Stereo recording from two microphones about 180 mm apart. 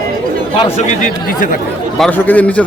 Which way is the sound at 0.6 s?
40° left (ahead or behind).